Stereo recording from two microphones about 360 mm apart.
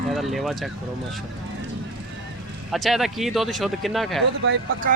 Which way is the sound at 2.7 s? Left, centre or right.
Centre.